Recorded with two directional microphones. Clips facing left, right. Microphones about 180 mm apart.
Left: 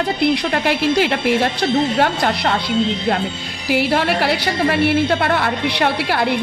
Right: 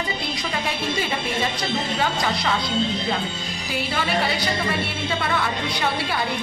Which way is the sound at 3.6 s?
75° left (ahead or behind).